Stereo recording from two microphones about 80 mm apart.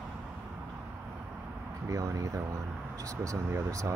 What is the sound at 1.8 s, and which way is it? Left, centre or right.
Speech, right.